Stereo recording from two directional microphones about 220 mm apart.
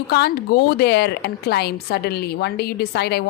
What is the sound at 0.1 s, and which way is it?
Speech, 45° left (ahead or behind).